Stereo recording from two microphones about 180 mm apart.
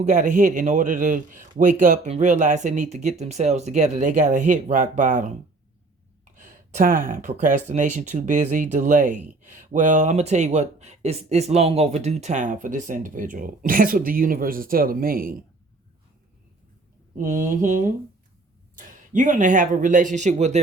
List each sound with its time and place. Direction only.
0.0 s speech: 45° right (ahead or behind)
6.3 s speech: 45° right (ahead or behind)
17.2 s speech: 50° right (ahead or behind)